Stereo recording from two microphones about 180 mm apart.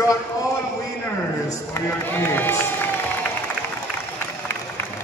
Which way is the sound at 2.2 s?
10° left (ahead or behind).